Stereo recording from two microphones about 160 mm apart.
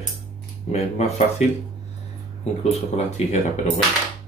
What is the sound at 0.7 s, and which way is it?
Speech, 45° left (ahead or behind).